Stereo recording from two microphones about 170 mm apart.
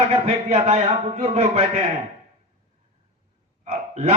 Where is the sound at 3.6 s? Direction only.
40° right (ahead or behind).